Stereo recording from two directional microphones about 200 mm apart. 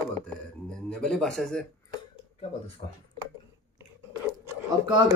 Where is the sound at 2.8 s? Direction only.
30° left (ahead or behind).